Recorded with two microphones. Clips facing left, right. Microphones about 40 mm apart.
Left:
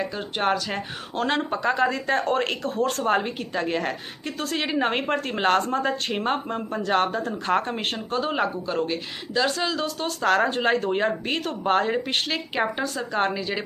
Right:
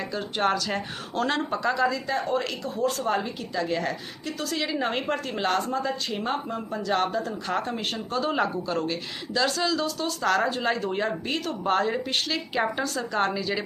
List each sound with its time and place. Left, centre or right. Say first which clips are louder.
0.3 s speech: left 1 dB; centre
1.1 s speech: left 1 dB; left
1.8 s a woman's voice: left 3 dB; left
8.4 s speech: left 1 dB; centre